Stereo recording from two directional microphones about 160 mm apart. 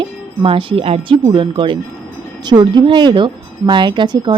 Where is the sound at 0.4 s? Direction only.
35° right (ahead or behind).